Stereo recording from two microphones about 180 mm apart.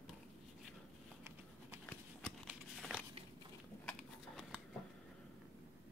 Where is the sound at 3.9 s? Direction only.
5° left (ahead or behind).